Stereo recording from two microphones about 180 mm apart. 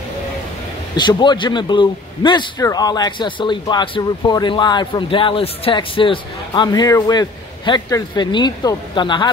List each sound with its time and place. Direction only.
0.9 s a man's voice: 25° left (ahead or behind)